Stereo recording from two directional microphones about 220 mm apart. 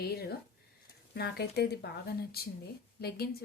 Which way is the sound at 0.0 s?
45° left (ahead or behind).